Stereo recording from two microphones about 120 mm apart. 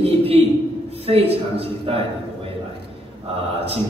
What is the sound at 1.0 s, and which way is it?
A man's voice, 55° right (ahead or behind).